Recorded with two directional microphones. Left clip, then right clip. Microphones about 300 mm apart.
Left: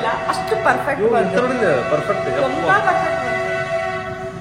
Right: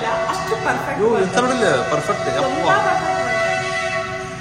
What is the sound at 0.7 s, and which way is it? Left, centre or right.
Speech, centre.